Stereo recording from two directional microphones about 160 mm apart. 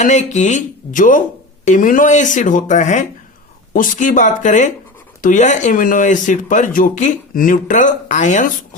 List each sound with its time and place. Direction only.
0.0 s speech: 45° left (ahead or behind)